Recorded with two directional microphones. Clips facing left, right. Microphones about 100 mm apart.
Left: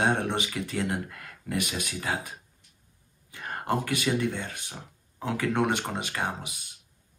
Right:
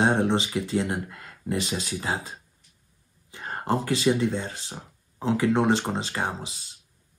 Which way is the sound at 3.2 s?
20° right (ahead or behind).